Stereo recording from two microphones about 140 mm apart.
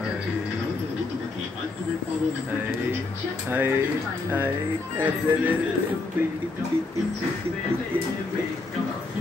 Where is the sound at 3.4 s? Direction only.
15° right (ahead or behind).